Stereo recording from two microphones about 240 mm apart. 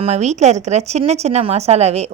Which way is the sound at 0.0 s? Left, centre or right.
Right.